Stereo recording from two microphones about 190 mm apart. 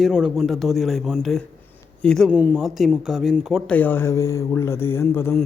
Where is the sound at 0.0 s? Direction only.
5° right (ahead or behind).